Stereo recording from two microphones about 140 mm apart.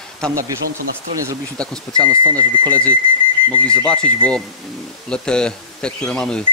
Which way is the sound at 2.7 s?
10° left (ahead or behind).